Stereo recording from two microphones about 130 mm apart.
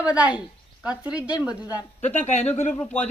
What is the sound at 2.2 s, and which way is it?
Speech, 55° left (ahead or behind).